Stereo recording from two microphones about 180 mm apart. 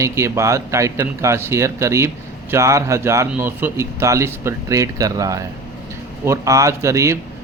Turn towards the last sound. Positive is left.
turn(degrees=-15)  # may be behind; listen again after turning